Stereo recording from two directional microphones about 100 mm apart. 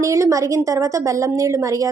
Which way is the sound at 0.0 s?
30° right (ahead or behind).